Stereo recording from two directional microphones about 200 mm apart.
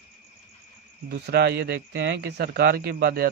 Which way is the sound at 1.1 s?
55° right (ahead or behind).